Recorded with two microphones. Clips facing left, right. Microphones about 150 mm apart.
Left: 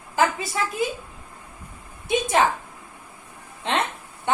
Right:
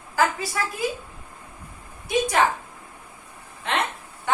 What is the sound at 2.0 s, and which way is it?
Speech, 20° left (ahead or behind).